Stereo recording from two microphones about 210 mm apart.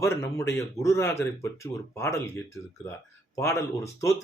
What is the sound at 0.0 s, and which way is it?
Speech, 15° left (ahead or behind).